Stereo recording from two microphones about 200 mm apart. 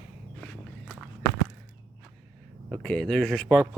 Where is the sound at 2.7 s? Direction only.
5° left (ahead or behind).